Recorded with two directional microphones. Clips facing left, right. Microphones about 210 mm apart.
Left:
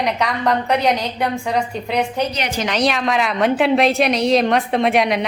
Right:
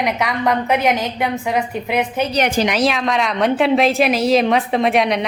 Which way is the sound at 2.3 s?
50° right (ahead or behind).